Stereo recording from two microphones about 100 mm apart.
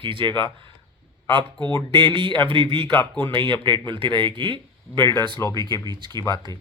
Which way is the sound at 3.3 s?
55° right (ahead or behind).